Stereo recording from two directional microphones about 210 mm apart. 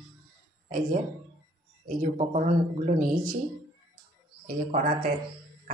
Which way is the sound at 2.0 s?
35° right (ahead or behind).